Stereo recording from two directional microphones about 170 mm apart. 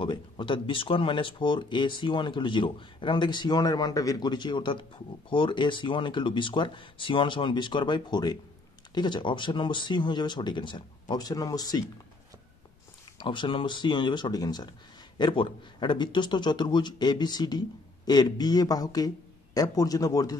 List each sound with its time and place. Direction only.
0.0 s speech: 30° left (ahead or behind)
13.2 s speech: 30° left (ahead or behind)